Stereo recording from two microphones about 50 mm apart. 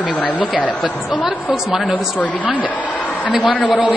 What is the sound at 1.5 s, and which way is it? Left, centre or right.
Speech, centre.